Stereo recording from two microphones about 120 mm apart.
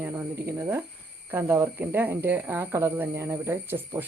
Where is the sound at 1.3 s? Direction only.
20° right (ahead or behind).